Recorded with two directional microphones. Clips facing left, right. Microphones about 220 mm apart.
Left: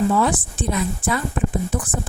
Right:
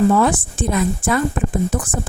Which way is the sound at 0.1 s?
50° right (ahead or behind).